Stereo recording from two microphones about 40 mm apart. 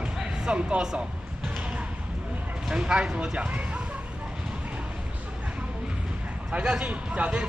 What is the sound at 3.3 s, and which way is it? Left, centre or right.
Speech, right.